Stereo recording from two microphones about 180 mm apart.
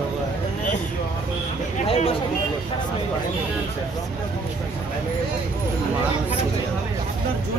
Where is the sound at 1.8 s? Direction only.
35° left (ahead or behind).